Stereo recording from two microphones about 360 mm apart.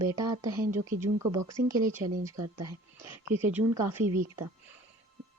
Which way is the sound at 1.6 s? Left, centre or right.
Right.